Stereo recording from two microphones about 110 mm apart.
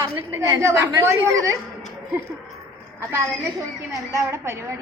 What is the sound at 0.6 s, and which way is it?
Speech, 25° right (ahead or behind).